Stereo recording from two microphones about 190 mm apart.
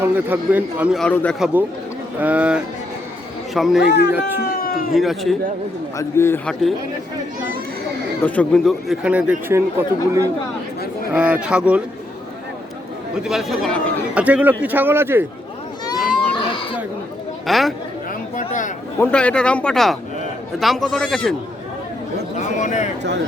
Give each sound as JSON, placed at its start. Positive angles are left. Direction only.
{"t": 0.0, "sound": "a man's voice", "side_deg": -10}
{"t": 2.1, "sound": "a man's voice", "side_deg": -10}
{"t": 3.8, "sound": "speech", "side_deg": 65}
{"t": 4.4, "sound": "a sound", "side_deg": 55}
{"t": 4.9, "sound": "a man's voice", "side_deg": 0}
{"t": 6.0, "sound": "a man's voice", "side_deg": 15}
{"t": 8.2, "sound": "a man's voice", "side_deg": 5}
{"t": 13.2, "sound": "a man's voice", "side_deg": 0}
{"t": 16.3, "sound": "a sound", "side_deg": 25}
{"t": 17.4, "sound": "speech", "side_deg": 0}
{"t": 18.4, "sound": "a sound", "side_deg": 40}
{"t": 18.9, "sound": "a man's voice", "side_deg": 5}
{"t": 22.4, "sound": "speech", "side_deg": 40}